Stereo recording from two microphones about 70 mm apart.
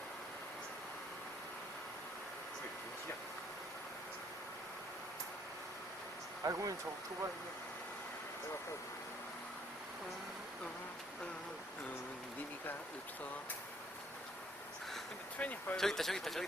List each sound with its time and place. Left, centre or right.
6.4 s speech: right
15.4 s speech: left
15.7 s speech: centre